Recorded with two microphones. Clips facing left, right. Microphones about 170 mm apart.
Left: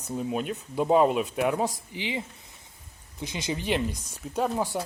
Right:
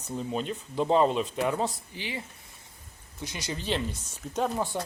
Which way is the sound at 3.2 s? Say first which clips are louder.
Left 4 dB; 20° left (ahead or behind).